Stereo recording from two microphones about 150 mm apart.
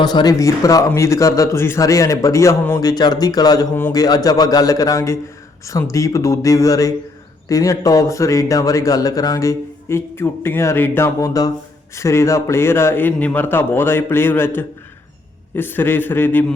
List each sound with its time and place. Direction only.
0.0 s a man's voice: 30° left (ahead or behind)